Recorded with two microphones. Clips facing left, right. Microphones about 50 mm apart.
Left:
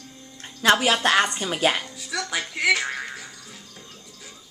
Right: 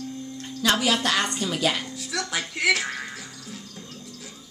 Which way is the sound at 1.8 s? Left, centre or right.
Centre.